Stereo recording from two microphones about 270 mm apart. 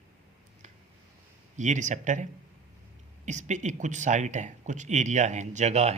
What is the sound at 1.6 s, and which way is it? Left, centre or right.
Speech, right.